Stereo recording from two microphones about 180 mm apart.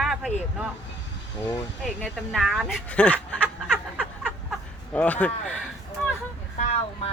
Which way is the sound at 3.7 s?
5° right (ahead or behind).